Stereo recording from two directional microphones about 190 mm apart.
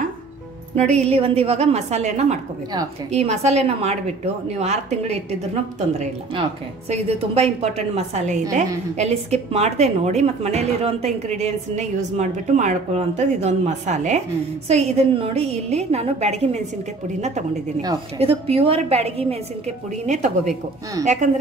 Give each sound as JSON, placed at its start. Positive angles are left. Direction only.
{"t": 0.9, "sound": "a woman's voice", "side_deg": -30}
{"t": 6.9, "sound": "a woman's voice", "side_deg": -30}
{"t": 17.8, "sound": "a woman's voice", "side_deg": -30}